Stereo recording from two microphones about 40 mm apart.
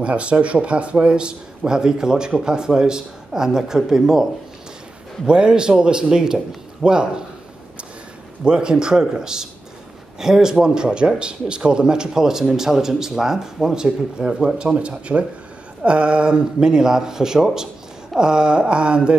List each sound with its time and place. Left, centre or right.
0.0 s speech: right; by 4.3 s centre
5.2 s speech: right
8.5 s speech: right